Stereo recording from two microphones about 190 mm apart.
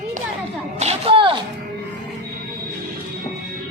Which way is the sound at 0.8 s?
30° right (ahead or behind).